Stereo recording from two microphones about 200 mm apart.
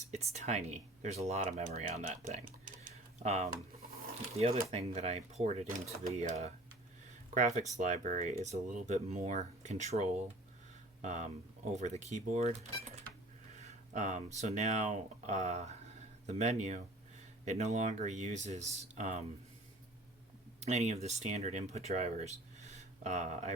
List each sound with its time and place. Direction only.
0.1 s speech: 35° right (ahead or behind)
4.7 s speech: 30° right (ahead or behind)
7.3 s speech: 35° right (ahead or behind)
20.6 s speech: 35° right (ahead or behind)